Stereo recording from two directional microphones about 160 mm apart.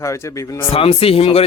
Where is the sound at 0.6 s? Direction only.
35° left (ahead or behind).